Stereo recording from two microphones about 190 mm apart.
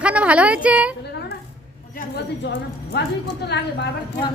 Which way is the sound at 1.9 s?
60° left (ahead or behind).